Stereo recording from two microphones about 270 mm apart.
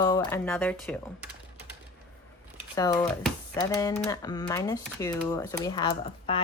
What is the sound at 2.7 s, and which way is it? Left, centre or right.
Speech, centre.